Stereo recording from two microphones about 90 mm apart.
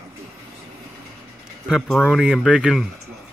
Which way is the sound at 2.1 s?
Centre (ahead or behind).